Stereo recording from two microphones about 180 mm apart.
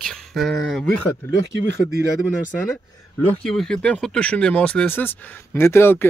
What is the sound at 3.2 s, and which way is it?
Speech, 5° left (ahead or behind).